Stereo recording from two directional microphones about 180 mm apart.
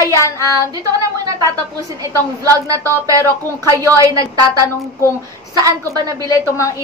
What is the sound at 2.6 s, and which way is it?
A woman's voice, 20° right (ahead or behind).